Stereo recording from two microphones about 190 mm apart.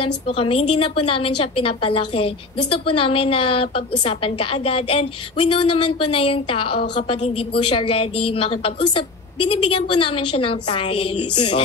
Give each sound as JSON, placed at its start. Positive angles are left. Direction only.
{"t": 0.0, "sound": "a woman's voice", "side_deg": 30}